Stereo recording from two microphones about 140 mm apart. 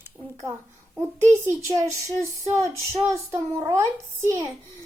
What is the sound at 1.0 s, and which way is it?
Speech, 20° right (ahead or behind).